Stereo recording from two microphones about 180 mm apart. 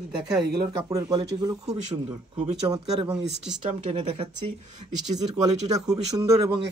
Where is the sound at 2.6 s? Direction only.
20° right (ahead or behind).